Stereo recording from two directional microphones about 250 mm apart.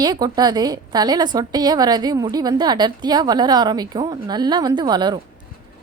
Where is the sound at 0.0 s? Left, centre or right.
Centre.